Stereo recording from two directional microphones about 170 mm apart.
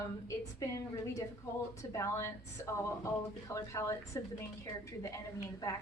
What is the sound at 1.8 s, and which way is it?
A woman's voice, 15° left (ahead or behind).